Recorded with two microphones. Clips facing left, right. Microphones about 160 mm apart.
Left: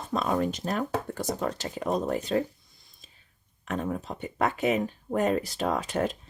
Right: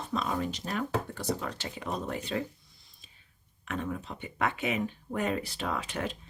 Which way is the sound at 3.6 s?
40° left (ahead or behind).